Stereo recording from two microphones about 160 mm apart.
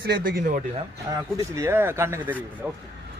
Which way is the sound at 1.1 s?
20° right (ahead or behind).